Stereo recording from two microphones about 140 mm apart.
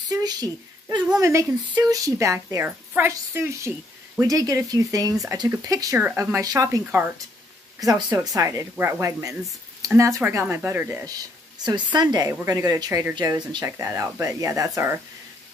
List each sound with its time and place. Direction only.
0.1 s a sound: 30° right (ahead or behind)
1.2 s a woman's voice: 20° right (ahead or behind)
5.9 s a woman's voice: 15° right (ahead or behind)
11.1 s a woman's voice: 30° right (ahead or behind)
13.7 s a woman's voice: 20° right (ahead or behind)